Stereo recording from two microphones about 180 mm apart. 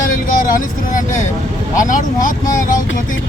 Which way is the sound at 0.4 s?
45° left (ahead or behind).